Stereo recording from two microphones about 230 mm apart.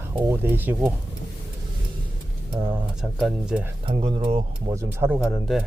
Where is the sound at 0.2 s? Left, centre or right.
Centre.